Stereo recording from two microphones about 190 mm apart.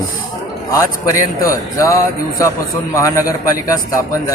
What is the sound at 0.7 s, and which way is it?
Speech, 15° left (ahead or behind).